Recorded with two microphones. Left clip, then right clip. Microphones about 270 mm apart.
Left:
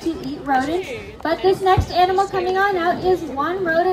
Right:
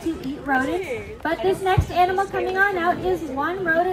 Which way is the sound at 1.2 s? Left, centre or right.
Left.